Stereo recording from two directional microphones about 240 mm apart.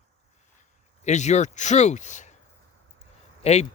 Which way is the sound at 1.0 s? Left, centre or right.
Left.